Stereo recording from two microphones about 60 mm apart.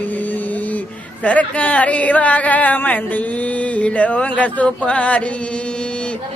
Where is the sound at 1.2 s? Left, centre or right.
Left.